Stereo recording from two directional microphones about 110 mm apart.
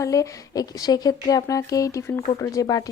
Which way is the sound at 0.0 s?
30° left (ahead or behind).